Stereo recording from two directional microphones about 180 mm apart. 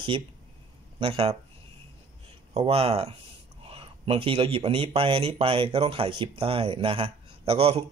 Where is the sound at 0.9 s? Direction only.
30° right (ahead or behind).